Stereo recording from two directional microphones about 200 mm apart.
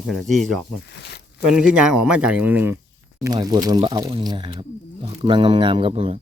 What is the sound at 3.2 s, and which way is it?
Speech, 20° right (ahead or behind).